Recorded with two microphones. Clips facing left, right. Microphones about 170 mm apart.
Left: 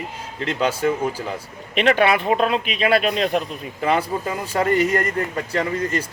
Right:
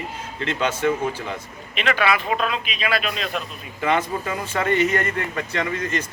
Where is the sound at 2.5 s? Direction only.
60° left (ahead or behind).